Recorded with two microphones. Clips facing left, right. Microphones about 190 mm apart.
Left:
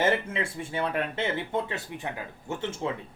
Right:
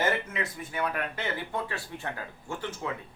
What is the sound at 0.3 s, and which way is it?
Speech, 30° left (ahead or behind).